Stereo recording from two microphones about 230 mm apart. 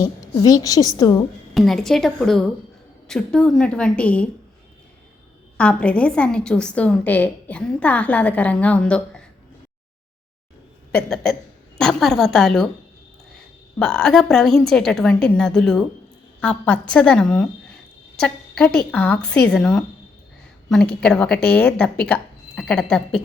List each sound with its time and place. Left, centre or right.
0.0 s a woman's voice: centre
1.5 s a woman's voice: centre
5.5 s a woman's voice: centre
10.9 s a woman's voice: centre